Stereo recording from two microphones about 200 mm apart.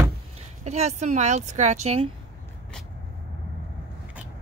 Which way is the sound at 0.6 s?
35° right (ahead or behind).